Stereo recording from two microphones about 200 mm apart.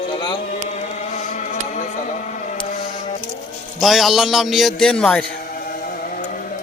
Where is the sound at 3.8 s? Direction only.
Centre (ahead or behind).